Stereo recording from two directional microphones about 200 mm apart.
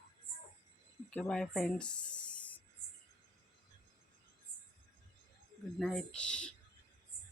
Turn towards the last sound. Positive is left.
turn(degrees=5)  # may be behind; listen again after turning